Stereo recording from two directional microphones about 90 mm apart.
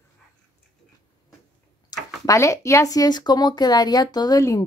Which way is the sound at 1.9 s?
45° left (ahead or behind).